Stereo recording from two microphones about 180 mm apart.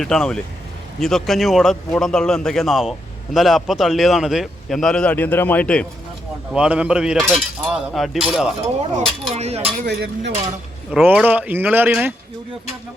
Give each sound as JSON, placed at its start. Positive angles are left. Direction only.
{"t": 0.0, "sound": "a man's voice", "side_deg": 0}
{"t": 6.5, "sound": "a man's voice", "side_deg": -5}
{"t": 9.3, "sound": "cutlery", "side_deg": -35}
{"t": 9.8, "sound": "speech", "side_deg": -70}
{"t": 10.9, "sound": "speech", "side_deg": -10}